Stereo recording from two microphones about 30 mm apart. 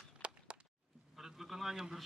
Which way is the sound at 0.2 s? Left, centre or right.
Right.